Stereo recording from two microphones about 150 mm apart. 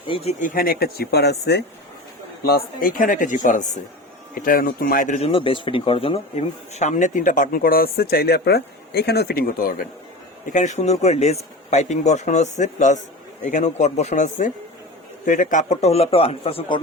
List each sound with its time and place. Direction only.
0.1 s speech: 45° left (ahead or behind)
0.4 s speech: 75° left (ahead or behind); by 3.7 s 60° left (ahead or behind)
4.4 s speech: 70° left (ahead or behind); by 6.1 s 40° left (ahead or behind)
6.7 s speech: 55° left (ahead or behind); by 9.8 s 70° left (ahead or behind)
10.4 s speech: 55° left (ahead or behind); by 16.8 s 35° left (ahead or behind)